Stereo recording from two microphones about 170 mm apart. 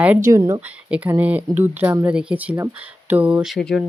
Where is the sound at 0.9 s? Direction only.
10° right (ahead or behind).